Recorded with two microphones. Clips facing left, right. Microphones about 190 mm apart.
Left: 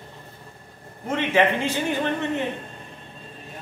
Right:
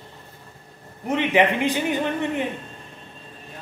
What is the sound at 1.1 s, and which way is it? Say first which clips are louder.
A man's voice: right 1 dB; 15° right (ahead or behind).